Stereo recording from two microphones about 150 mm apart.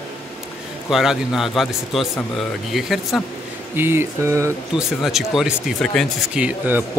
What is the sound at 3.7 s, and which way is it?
Speech, 15° right (ahead or behind).